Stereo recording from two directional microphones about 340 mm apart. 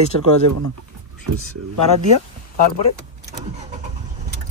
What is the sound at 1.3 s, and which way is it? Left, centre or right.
Speech, right.